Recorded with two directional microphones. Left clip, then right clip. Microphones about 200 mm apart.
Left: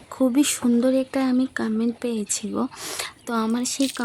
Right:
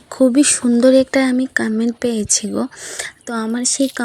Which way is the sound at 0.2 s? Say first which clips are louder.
Right 7 dB; 20° right (ahead or behind).